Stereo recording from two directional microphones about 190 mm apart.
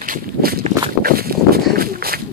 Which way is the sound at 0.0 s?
50° right (ahead or behind).